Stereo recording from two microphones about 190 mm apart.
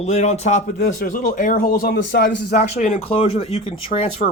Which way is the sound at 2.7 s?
40° left (ahead or behind).